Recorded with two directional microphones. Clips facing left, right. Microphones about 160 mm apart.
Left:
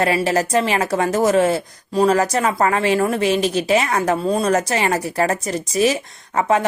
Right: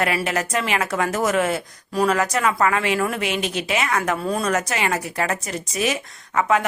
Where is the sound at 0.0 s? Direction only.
30° left (ahead or behind).